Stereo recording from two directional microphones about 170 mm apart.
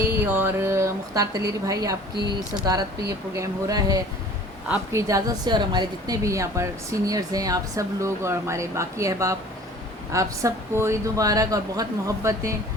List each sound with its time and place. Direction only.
0.2 s speech: 10° right (ahead or behind)
3.1 s a woman's voice: 20° right (ahead or behind)